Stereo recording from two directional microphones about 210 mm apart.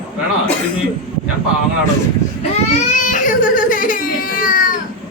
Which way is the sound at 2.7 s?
35° left (ahead or behind).